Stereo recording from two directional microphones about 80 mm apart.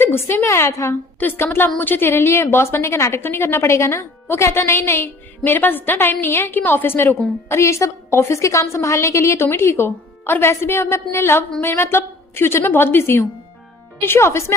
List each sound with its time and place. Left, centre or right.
0.0 s a woman's voice: left
1.2 s a woman's voice: left